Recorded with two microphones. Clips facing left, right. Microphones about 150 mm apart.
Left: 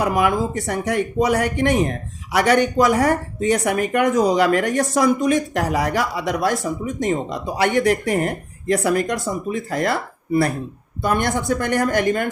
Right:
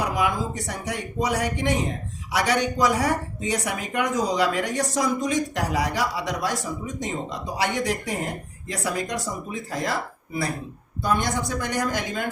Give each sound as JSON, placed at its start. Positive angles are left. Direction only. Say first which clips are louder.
{"t": 0.0, "sound": "speech", "louder": "left 6 dB", "side_deg": 55}